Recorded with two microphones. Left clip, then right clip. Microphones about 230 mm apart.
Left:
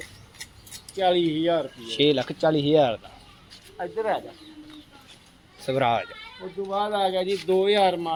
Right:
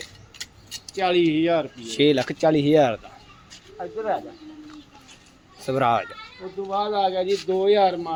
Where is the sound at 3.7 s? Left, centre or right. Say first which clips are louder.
Even; left.